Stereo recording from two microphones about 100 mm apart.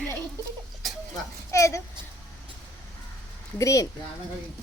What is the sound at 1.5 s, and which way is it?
Speech, 30° left (ahead or behind).